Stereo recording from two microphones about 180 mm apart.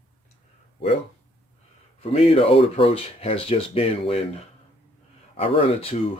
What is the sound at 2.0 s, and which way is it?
Speech, 35° left (ahead or behind).